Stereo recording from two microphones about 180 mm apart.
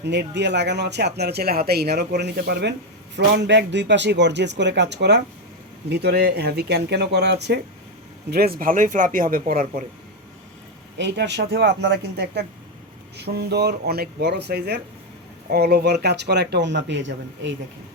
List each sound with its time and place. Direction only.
0.0 s speech: 75° right (ahead or behind)
8.3 s a man's voice: 60° right (ahead or behind)
10.9 s speech: 75° right (ahead or behind)